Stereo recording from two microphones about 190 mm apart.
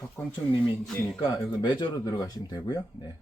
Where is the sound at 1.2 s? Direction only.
20° left (ahead or behind).